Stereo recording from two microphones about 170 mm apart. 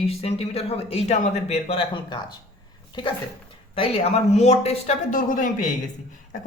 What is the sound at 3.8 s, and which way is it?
Speech, 40° left (ahead or behind).